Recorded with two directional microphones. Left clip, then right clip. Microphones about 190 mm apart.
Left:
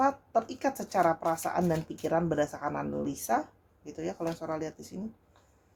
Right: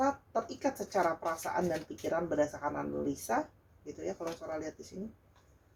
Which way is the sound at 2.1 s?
45° left (ahead or behind).